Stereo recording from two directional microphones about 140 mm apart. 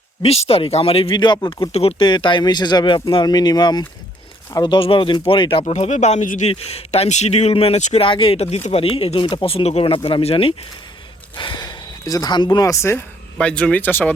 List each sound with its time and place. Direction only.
0.2 s speech: 45° left (ahead or behind); by 6.5 s 65° left (ahead or behind)
6.5 s speech: 45° left (ahead or behind)
8.0 s speech: 40° left (ahead or behind); by 13.1 s 20° left (ahead or behind)
13.4 s speech: 10° left (ahead or behind)